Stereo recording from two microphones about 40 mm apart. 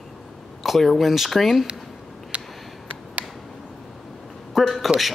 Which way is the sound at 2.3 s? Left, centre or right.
Right.